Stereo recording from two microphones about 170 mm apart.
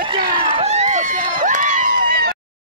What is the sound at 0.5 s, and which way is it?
Run, 40° right (ahead or behind).